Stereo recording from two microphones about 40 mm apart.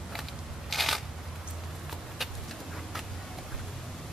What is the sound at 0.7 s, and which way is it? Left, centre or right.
Shuffling cards, centre.